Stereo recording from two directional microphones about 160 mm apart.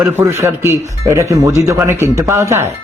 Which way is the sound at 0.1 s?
15° right (ahead or behind).